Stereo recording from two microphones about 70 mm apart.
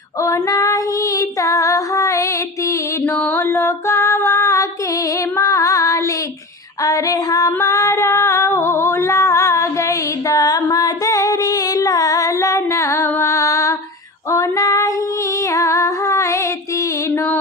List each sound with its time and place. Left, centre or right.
0.2 s female singing: left
0.4 s female singing: left
3.0 s mantra: left
3.3 s music: left
5.0 s female singing: left
13.1 s music: left
14.3 s female singing: left
15.4 s music: left